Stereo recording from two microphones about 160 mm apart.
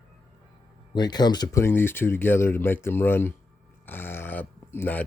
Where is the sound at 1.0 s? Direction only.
25° left (ahead or behind).